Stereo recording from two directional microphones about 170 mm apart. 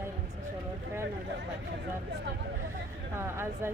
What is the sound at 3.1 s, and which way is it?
Speech, 15° right (ahead or behind).